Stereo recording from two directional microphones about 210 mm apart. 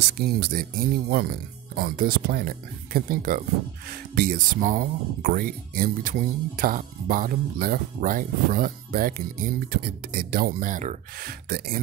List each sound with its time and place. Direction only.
0.0 s speech: 50° right (ahead or behind)